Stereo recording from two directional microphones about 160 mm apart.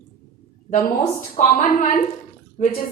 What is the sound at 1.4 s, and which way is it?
A woman's voice, 60° left (ahead or behind).